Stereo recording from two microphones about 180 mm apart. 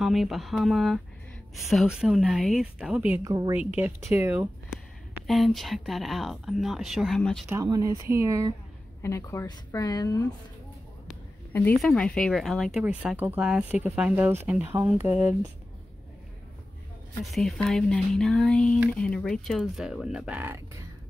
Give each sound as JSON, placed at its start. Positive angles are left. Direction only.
{"t": 0.0, "sound": "speech", "side_deg": 0}
{"t": 3.3, "sound": "speech", "side_deg": -20}
{"t": 3.5, "sound": "speech", "side_deg": -10}
{"t": 5.2, "sound": "speech", "side_deg": 0}
{"t": 7.5, "sound": "speech", "side_deg": -20}
{"t": 9.0, "sound": "speech", "side_deg": 15}
{"t": 11.5, "sound": "speech", "side_deg": 10}
{"t": 17.2, "sound": "speech", "side_deg": 0}